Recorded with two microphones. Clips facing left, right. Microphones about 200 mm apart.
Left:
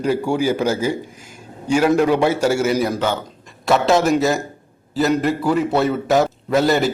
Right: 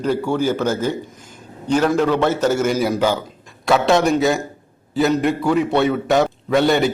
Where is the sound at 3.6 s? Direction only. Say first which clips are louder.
Even; centre (ahead or behind).